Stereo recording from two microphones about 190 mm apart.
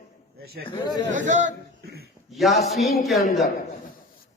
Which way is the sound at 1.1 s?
40° right (ahead or behind).